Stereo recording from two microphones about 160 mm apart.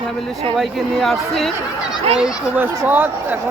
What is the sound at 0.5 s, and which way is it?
Speech, centre (ahead or behind).